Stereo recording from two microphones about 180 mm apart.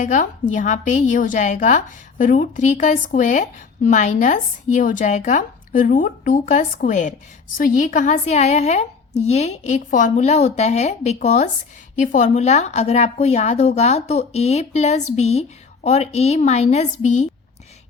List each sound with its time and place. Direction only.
0.0 s a woman's voice: 45° left (ahead or behind)